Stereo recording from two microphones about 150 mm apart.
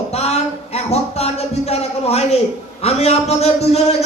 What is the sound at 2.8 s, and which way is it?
A man's voice, 45° left (ahead or behind).